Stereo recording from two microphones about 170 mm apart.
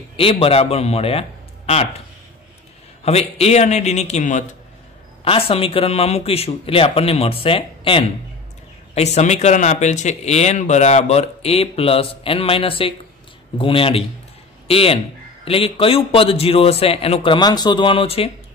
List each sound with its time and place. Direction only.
0.2 s speech: 35° left (ahead or behind)
3.0 s speech: 35° left (ahead or behind)
5.2 s speech: 35° left (ahead or behind)